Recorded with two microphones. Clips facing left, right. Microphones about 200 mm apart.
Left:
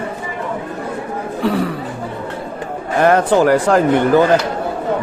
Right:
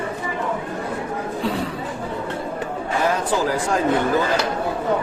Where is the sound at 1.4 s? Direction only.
65° left (ahead or behind).